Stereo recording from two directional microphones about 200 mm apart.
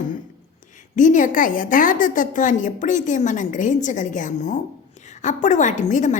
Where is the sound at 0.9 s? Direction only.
40° left (ahead or behind).